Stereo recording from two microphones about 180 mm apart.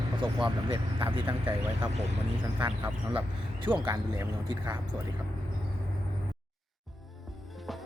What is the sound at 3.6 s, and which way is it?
Speech, 25° right (ahead or behind).